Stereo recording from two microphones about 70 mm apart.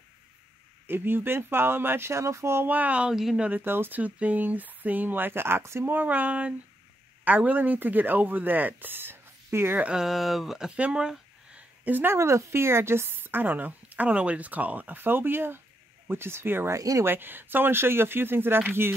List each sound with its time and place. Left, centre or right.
0.8 s speech: right
2.6 s speech: right
3.1 s speech: centre
3.3 s speech: right
3.6 s speech: right
4.0 s speech: right
5.9 s speech: right
9.8 s speech: centre
10.8 s a sound: centre; by 12.2 s right
12.2 s speech: right
16.7 s speech: right
17.0 s speech: right